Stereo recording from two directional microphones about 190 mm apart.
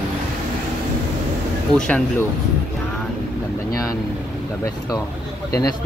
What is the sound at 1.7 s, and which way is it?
Speech, 5° left (ahead or behind).